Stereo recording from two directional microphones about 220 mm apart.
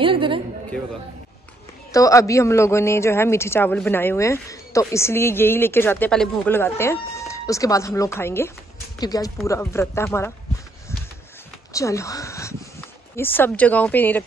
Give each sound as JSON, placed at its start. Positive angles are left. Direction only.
{"t": 0.0, "sound": "a sound", "side_deg": -25}
{"t": 1.9, "sound": "a man's voice", "side_deg": 15}
{"t": 11.7, "sound": "speech", "side_deg": 15}